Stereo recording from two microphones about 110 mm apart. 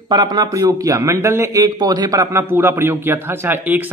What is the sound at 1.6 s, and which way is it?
A man's voice, 40° right (ahead or behind).